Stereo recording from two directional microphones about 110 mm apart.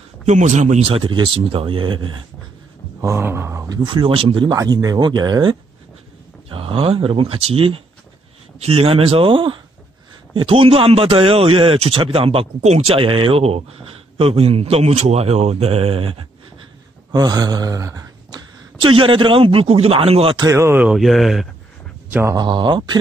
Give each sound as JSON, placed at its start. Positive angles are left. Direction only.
{"t": 0.3, "sound": "speech", "side_deg": -90}
{"t": 3.0, "sound": "a sound", "side_deg": -20}
{"t": 3.6, "sound": "speech", "side_deg": -40}
{"t": 4.6, "sound": "speech", "side_deg": -30}
{"t": 6.5, "sound": "a man's voice", "side_deg": -55}
{"t": 17.1, "sound": "speech", "side_deg": -35}
{"t": 18.8, "sound": "a man's voice", "side_deg": -50}
{"t": 20.5, "sound": "speech", "side_deg": -20}
{"t": 20.9, "sound": "speech", "side_deg": 0}
{"t": 22.3, "sound": "speech", "side_deg": -40}